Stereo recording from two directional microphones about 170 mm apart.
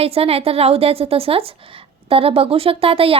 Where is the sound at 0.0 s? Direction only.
35° right (ahead or behind).